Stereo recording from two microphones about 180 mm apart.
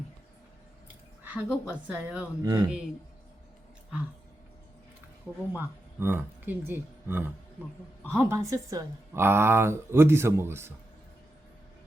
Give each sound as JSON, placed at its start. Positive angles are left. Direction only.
{"t": 1.2, "sound": "a sound", "side_deg": -10}
{"t": 1.6, "sound": "a woman's voice", "side_deg": -5}
{"t": 2.4, "sound": "speech", "side_deg": -20}
{"t": 5.5, "sound": "a woman's voice", "side_deg": -10}